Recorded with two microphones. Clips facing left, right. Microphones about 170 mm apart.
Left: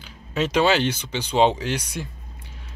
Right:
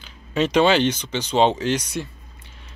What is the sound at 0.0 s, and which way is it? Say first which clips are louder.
Speech: right 3 dB; 5° left (ahead or behind).